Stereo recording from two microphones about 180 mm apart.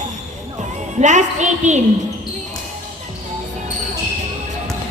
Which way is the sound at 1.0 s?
40° right (ahead or behind).